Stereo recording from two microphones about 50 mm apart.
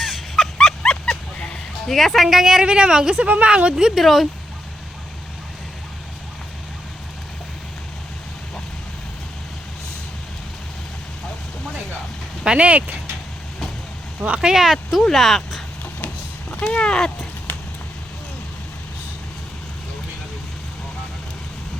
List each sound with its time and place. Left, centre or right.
0.0 s dog: centre
1.9 s speech: centre
4.0 s speech: centre
12.5 s speech: right
14.2 s speech: right
14.4 s speech: centre
16.7 s speech: centre